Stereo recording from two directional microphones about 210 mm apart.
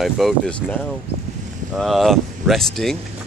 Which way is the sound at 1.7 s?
Centre (ahead or behind).